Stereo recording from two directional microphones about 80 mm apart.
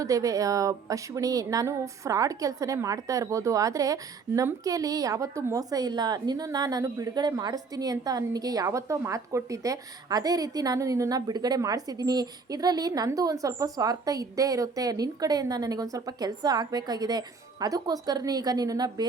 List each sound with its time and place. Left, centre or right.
0.0 s a woman's voice: right